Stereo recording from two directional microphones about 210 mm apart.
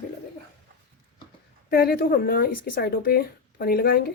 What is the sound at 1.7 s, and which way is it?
Speech, 45° left (ahead or behind).